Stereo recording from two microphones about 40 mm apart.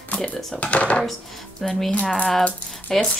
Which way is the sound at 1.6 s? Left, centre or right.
Centre.